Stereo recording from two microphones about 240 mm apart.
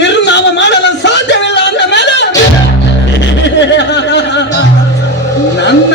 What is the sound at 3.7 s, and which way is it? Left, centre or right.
Music, left.